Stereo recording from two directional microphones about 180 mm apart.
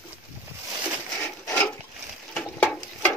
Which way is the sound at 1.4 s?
15° left (ahead or behind).